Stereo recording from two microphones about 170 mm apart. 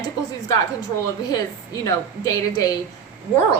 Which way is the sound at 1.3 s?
20° left (ahead or behind).